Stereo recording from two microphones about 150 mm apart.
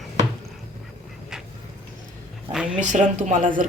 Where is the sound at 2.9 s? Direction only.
55° right (ahead or behind).